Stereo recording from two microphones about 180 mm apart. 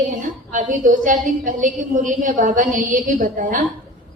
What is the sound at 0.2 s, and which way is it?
A woman's voice, 45° right (ahead or behind).